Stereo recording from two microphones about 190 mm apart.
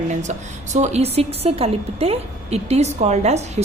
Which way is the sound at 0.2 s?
40° right (ahead or behind).